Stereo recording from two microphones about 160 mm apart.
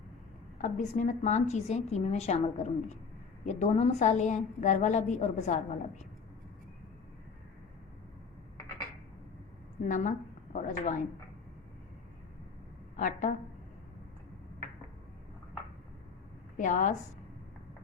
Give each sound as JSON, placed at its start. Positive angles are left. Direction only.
{"t": 0.6, "sound": "a woman's voice", "side_deg": 50}
{"t": 9.8, "sound": "a woman's voice", "side_deg": 55}
{"t": 13.0, "sound": "a woman's voice", "side_deg": 50}
{"t": 16.6, "sound": "a woman's voice", "side_deg": 50}